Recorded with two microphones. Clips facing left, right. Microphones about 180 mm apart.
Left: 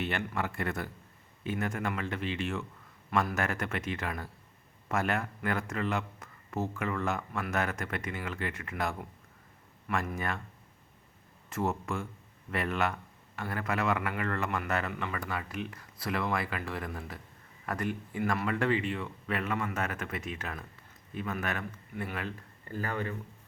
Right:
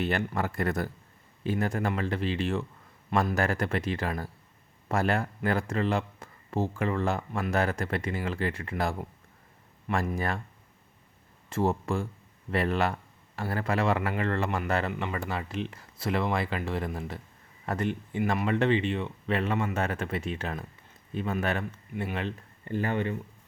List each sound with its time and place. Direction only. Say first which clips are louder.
0.0 s speech: right 4 dB; 35° right (ahead or behind)
11.4 s speech: right 5 dB; 30° right (ahead or behind)